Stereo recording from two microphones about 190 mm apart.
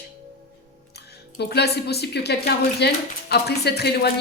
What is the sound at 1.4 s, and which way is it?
Speech, 60° left (ahead or behind).